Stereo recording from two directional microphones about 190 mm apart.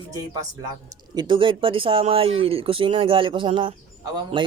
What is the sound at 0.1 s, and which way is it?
Speech, 20° right (ahead or behind).